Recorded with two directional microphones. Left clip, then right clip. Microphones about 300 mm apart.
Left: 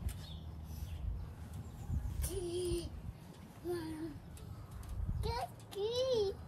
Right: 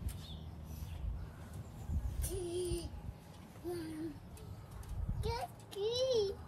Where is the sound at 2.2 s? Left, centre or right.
Centre.